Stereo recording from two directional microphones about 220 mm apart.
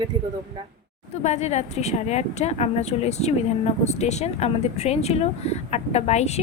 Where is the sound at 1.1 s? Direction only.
30° left (ahead or behind).